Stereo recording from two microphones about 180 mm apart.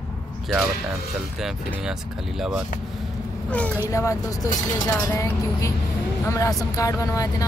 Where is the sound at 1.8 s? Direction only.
Centre (ahead or behind).